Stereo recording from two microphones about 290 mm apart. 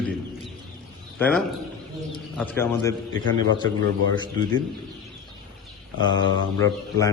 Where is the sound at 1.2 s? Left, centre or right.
Centre.